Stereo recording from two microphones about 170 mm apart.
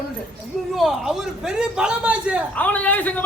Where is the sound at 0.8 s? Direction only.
Centre (ahead or behind).